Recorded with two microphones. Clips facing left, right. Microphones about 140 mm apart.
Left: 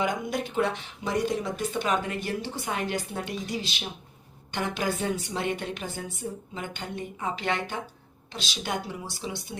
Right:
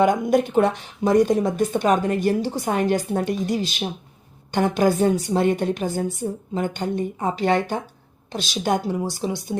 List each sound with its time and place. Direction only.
0.0 s a woman's voice: 50° right (ahead or behind)